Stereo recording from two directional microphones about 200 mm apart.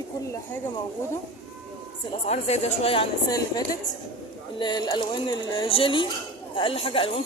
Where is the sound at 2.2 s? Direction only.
35° left (ahead or behind).